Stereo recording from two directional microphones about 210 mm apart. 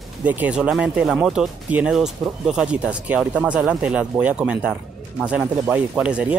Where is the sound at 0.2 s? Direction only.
5° right (ahead or behind).